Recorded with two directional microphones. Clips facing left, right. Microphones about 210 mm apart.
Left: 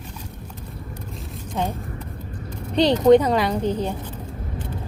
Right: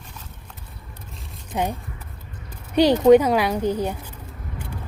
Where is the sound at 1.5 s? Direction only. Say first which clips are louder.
Right 1 dB; 10° right (ahead or behind).